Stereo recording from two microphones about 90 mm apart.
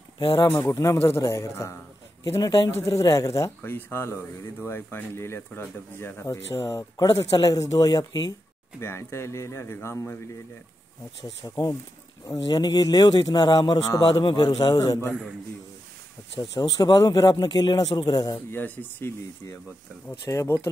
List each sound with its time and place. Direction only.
0.5 s speech: 30° left (ahead or behind)
2.3 s a man's voice: 45° left (ahead or behind)
3.6 s speech: 25° left (ahead or behind); by 8.4 s 45° left (ahead or behind)
8.7 s a man's voice: 30° left (ahead or behind)
11.4 s a man's voice: 50° left (ahead or behind)
16.3 s a man's voice: 50° left (ahead or behind)
18.5 s a man's voice: 20° left (ahead or behind)